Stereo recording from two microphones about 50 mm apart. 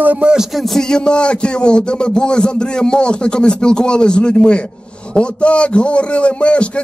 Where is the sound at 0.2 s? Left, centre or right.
Centre.